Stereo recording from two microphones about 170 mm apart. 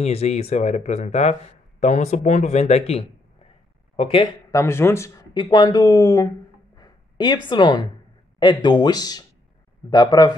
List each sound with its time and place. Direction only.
0.0 s speech: 40° left (ahead or behind)
4.5 s speech: 15° left (ahead or behind)
6.8 s a sound: 25° left (ahead or behind)
8.4 s speech: 25° left (ahead or behind)